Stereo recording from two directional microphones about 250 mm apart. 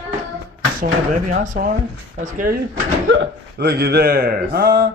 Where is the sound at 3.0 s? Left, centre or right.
Right.